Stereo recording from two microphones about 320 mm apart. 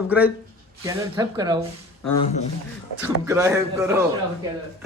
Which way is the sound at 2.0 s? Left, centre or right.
Left.